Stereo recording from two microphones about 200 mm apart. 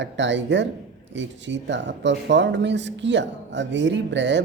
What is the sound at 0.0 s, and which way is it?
Speech, 65° right (ahead or behind).